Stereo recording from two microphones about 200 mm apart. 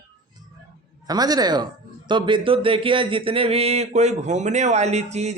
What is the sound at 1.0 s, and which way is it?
Speech, 20° right (ahead or behind).